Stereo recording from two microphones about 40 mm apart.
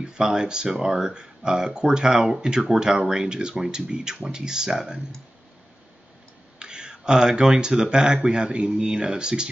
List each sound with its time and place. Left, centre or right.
0.2 s speech: centre
6.6 s speech: centre